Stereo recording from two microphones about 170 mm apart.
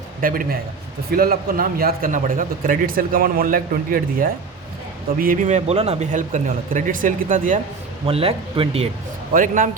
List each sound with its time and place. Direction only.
0.2 s a man's voice: 55° right (ahead or behind)
8.0 s speech: 35° right (ahead or behind)
9.3 s speech: 50° right (ahead or behind)